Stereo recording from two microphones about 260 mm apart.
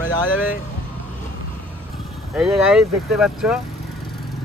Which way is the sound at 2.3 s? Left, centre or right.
Centre.